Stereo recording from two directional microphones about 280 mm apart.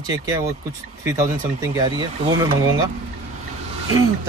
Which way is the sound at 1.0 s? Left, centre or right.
Centre.